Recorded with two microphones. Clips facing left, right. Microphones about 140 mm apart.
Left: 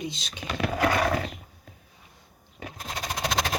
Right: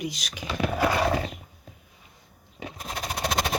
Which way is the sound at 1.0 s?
25° right (ahead or behind).